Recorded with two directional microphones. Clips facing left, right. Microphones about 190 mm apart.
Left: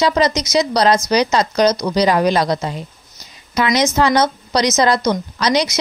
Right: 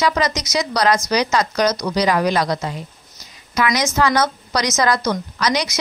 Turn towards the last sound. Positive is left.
turn(degrees=25)  # may be behind; listen again after turning